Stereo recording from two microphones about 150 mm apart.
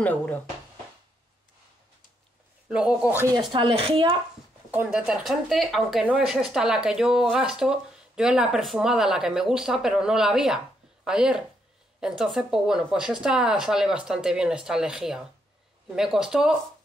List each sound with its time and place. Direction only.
0.0 s speech: 10° left (ahead or behind)
2.7 s speech: 5° right (ahead or behind)
3.5 s speech: 35° right (ahead or behind)
4.6 s speech: 10° right (ahead or behind)